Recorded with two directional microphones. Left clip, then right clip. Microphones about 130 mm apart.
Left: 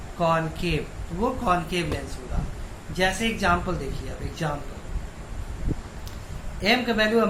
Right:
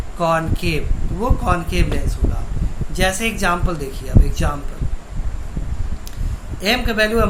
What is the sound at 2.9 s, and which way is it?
Speech, 35° right (ahead or behind).